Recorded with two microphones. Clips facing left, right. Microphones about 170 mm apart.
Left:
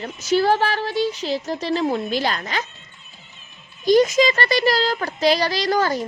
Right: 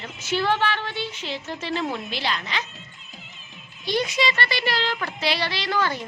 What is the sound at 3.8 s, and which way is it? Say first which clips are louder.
A child's voice: left 9 dB; 45° left (ahead or behind).